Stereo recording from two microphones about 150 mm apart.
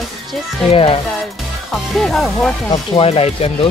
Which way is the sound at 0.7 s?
40° left (ahead or behind).